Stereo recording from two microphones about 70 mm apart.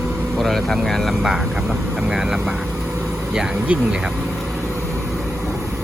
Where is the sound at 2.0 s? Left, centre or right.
Centre.